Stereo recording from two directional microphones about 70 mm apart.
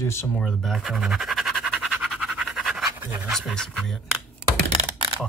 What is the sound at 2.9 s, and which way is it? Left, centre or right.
Pant, right.